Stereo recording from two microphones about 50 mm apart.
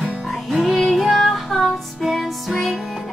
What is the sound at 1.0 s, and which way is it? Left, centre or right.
Child singing, centre.